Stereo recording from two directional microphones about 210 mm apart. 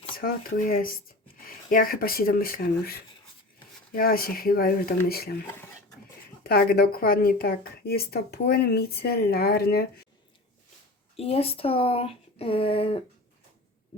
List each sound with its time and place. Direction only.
0.2 s a woman's voice: 45° left (ahead or behind)
11.2 s speech: 30° left (ahead or behind)